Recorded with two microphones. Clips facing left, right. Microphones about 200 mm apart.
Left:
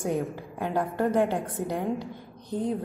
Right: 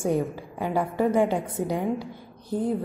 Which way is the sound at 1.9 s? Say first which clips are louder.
Even; 15° left (ahead or behind).